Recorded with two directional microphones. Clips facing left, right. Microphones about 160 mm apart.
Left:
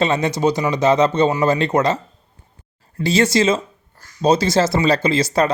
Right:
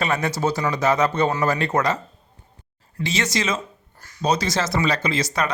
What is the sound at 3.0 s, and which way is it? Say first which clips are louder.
Speech: left 8 dB; 35° left (ahead or behind).